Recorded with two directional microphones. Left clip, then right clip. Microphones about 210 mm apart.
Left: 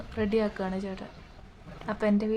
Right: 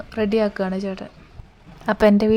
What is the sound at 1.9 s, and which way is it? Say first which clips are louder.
Speech: right 12 dB; 40° right (ahead or behind).